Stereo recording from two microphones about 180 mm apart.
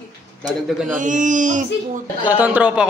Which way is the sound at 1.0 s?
45° right (ahead or behind).